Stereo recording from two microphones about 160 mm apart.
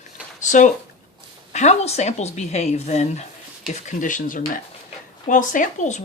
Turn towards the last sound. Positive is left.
turn(degrees=50)  # may be behind; listen again after turning